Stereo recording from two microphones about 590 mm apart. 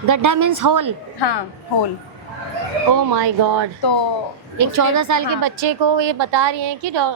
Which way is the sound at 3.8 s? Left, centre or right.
Left.